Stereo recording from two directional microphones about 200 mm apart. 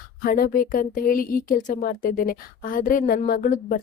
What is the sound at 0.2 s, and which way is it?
Speech, 45° left (ahead or behind).